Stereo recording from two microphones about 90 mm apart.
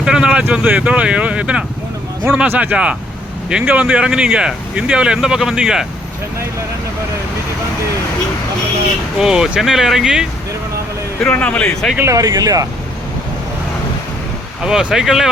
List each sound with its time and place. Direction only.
0.0 s speech: 10° right (ahead or behind)
9.1 s speech: 10° right (ahead or behind)
11.2 s speech: 15° left (ahead or behind)
12.0 s speech: 40° right (ahead or behind)
14.6 s speech: 10° right (ahead or behind)